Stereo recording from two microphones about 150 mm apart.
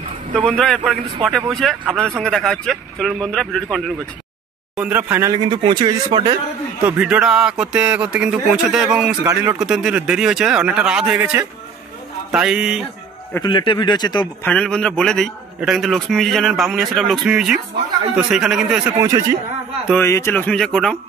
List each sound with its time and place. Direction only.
0.4 s a man's voice: 5° left (ahead or behind)
4.7 s speech: 10° right (ahead or behind)
5.3 s speech: 30° right (ahead or behind)
6.8 s speech: 10° right (ahead or behind)
9.2 s speech: 20° right (ahead or behind)
9.6 s a man's voice: 5° right (ahead or behind)
12.3 s a man's voice: 5° right (ahead or behind)
13.4 s speech: 35° left (ahead or behind)
14.4 s a man's voice: 5° left (ahead or behind)
18.9 s a man's voice: 25° right (ahead or behind)
20.0 s speech: 20° left (ahead or behind)